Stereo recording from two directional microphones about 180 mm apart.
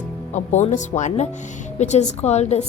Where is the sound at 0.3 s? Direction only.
40° left (ahead or behind).